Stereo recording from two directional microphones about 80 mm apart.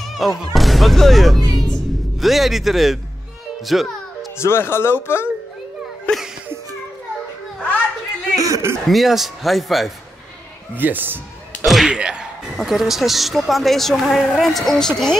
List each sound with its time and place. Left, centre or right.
0.0 s music: centre
0.4 s speech: centre
3.6 s music: centre
4.4 s speech: left
6.1 s music: centre
8.4 s a sound: right
8.8 s speech: centre
10.7 s a man's voice: right
11.6 s slam: centre
11.9 s a sound: centre
12.5 s speech: centre